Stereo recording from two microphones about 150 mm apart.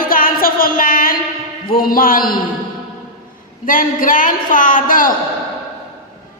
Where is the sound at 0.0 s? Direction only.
70° left (ahead or behind).